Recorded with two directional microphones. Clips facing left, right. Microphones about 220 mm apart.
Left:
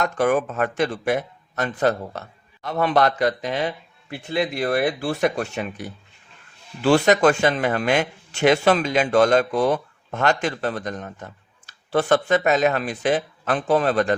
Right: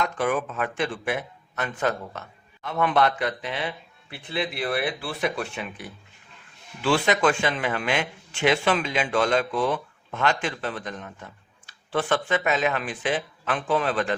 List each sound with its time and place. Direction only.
0.0 s a man's voice: 45° left (ahead or behind)